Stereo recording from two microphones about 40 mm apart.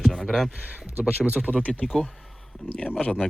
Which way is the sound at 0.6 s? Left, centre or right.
Right.